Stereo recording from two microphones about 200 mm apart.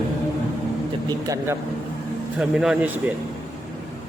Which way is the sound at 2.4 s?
5° right (ahead or behind).